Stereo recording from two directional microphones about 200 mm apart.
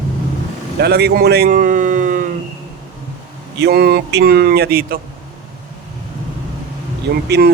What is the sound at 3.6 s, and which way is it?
Speech, 55° right (ahead or behind).